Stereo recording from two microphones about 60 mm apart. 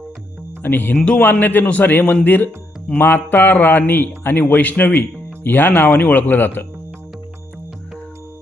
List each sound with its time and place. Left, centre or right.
0.6 s a man's voice: left
0.9 s a man's voice: centre
1.2 s a man's voice: left